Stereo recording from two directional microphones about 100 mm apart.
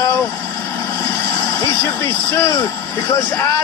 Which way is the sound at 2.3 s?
30° left (ahead or behind).